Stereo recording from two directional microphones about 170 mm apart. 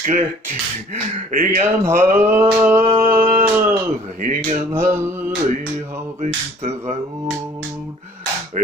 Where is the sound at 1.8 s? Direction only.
15° right (ahead or behind).